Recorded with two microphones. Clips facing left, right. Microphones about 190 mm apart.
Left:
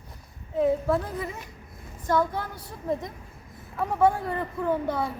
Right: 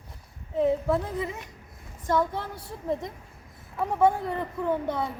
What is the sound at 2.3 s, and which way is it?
A woman's voice, 25° right (ahead or behind).